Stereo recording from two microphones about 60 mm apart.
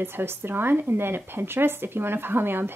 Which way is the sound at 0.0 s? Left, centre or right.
Right.